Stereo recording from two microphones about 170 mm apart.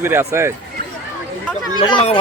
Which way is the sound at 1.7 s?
25° left (ahead or behind).